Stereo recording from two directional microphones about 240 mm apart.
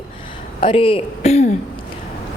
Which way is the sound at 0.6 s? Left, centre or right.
Left.